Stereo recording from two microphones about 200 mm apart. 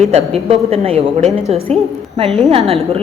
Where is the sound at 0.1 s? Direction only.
30° right (ahead or behind).